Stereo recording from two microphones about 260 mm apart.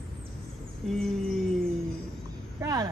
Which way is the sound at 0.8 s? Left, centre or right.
Centre.